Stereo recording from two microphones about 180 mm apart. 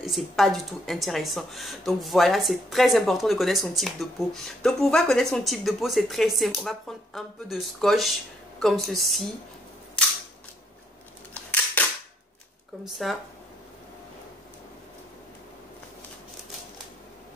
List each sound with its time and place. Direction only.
0.0 s a woman's voice: centre (ahead or behind)
11.8 s cap gun: 10° left (ahead or behind)
12.8 s a woman's voice: centre (ahead or behind)